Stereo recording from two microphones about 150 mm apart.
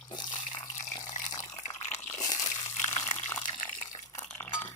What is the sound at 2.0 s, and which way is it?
Crunch, 25° left (ahead or behind).